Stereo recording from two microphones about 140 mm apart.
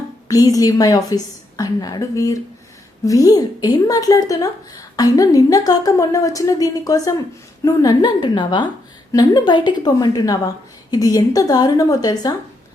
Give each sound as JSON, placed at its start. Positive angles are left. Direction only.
{"t": 0.3, "sound": "a woman's voice", "side_deg": 25}